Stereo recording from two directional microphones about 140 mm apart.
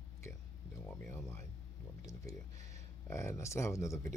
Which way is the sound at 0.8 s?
15° left (ahead or behind).